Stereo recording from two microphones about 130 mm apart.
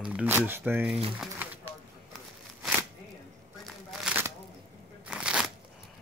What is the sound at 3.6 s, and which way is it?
Shuffling cards, 5° right (ahead or behind).